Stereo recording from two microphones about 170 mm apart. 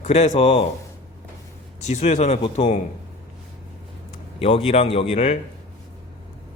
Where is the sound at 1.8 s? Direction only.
40° left (ahead or behind).